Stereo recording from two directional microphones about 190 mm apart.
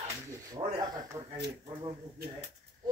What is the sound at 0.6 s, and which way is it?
Speech, 30° right (ahead or behind).